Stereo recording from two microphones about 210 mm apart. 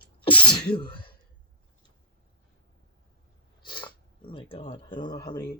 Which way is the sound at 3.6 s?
20° left (ahead or behind).